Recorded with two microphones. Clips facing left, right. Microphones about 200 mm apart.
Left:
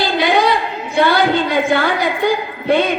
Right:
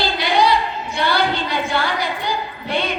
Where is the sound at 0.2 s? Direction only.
50° left (ahead or behind).